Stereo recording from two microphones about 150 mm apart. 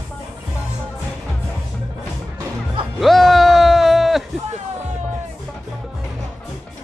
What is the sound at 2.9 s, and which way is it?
Music, centre (ahead or behind).